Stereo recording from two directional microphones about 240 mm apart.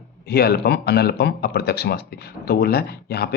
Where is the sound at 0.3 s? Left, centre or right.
Left.